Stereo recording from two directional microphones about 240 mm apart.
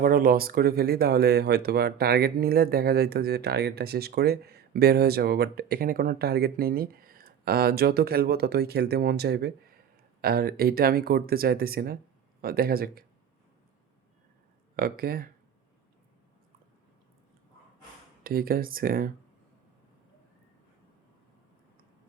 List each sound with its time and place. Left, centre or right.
0.0 s speech: right
14.8 s speech: right
18.2 s speech: right